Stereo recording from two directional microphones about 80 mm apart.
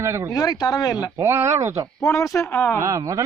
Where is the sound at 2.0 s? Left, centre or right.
Left.